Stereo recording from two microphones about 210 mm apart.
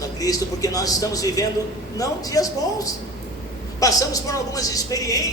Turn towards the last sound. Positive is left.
turn(degrees=15)  # may be behind; listen again after turning